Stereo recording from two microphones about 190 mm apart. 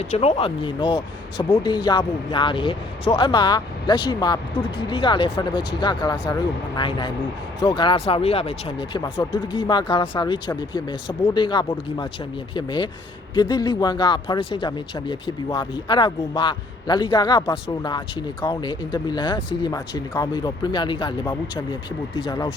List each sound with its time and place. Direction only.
0.0 s speech: 35° left (ahead or behind)
8.9 s speech: 15° left (ahead or behind)